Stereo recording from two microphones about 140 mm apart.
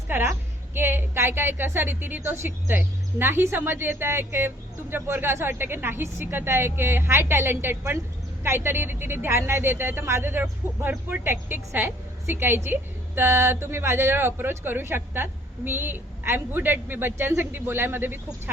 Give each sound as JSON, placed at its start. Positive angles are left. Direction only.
{"t": 0.1, "sound": "a woman's voice", "side_deg": -15}